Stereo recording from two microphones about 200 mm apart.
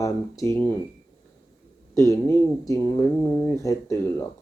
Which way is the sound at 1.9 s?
15° left (ahead or behind).